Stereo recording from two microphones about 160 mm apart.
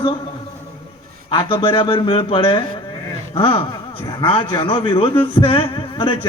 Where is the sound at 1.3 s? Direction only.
30° left (ahead or behind).